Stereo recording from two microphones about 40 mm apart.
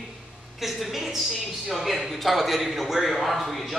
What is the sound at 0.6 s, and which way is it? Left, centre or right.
A man's voice, centre.